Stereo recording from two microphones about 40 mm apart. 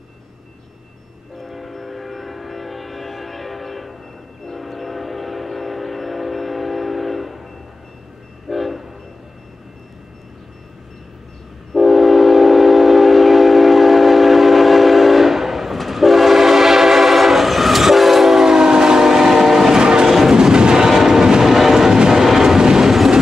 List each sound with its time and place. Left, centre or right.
1.4 s train: centre
8.5 s train: centre
11.7 s train: centre